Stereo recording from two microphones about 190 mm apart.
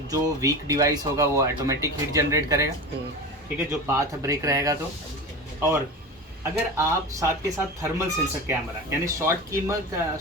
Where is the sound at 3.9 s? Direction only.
15° right (ahead or behind).